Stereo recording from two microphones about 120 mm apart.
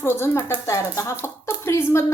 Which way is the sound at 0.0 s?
20° left (ahead or behind).